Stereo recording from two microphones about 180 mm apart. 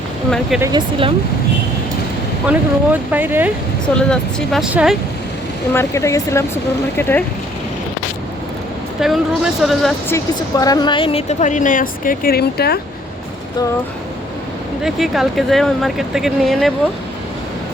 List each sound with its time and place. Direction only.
0.6 s speech: 25° right (ahead or behind)
2.5 s speech: 10° right (ahead or behind)
3.9 s speech: 5° left (ahead or behind)
5.7 s speech: 15° left (ahead or behind)
9.0 s speech: centre (ahead or behind)
10.1 s speech: 20° left (ahead or behind); by 12.8 s 60° left (ahead or behind)
14.8 s speech: centre (ahead or behind)